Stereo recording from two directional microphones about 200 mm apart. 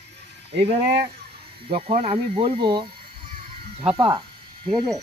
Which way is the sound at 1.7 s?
30° right (ahead or behind).